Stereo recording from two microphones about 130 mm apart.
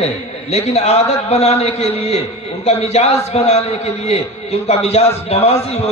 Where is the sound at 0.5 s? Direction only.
55° left (ahead or behind).